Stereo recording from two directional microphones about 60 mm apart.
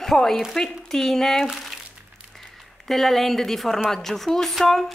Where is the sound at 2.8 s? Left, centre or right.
Centre.